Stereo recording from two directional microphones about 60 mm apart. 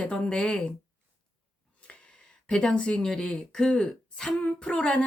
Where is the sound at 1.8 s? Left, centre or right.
Centre.